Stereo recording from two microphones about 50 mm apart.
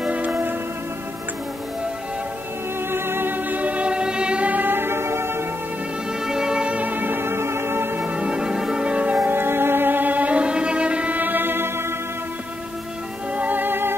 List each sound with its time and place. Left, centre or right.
0.0 s music: right
2.9 s music: right; by 4.5 s centre
4.5 s music: right
6.2 s music: centre; by 8.0 s right
8.0 s music: right
8.9 s music: right
9.3 s violin: right
11.1 s music: right
13.3 s music: right